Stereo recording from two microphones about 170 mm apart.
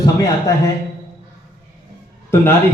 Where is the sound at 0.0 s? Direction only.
20° left (ahead or behind).